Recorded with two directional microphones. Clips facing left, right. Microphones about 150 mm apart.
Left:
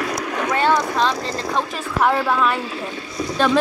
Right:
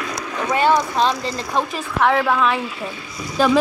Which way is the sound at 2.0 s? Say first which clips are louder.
Right 1 dB; 5° left (ahead or behind).